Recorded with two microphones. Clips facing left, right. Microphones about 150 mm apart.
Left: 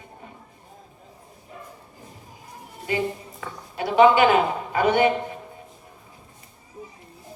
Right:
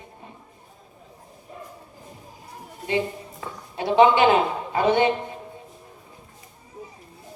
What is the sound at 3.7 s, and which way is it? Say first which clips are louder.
A woman's voice: left 1 dB; 25° right (ahead or behind).